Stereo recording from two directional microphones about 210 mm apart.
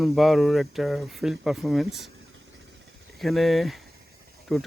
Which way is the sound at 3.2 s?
Centre (ahead or behind).